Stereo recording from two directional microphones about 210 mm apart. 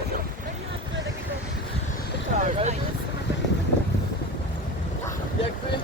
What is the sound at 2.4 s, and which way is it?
Speech, 35° right (ahead or behind).